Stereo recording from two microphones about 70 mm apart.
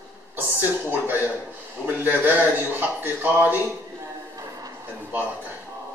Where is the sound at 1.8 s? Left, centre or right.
Right.